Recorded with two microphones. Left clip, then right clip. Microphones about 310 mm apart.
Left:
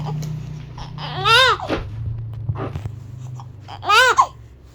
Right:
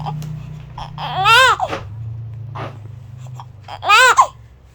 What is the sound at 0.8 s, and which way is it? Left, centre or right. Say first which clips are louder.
Babbling: right 6 dB; centre.